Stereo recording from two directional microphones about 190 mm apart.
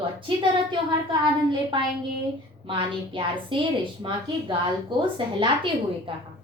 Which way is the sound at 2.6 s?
25° right (ahead or behind).